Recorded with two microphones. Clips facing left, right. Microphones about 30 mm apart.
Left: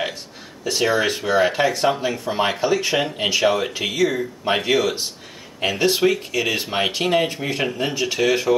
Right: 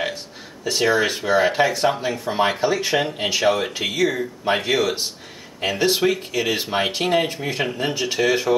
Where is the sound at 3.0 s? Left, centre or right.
Centre.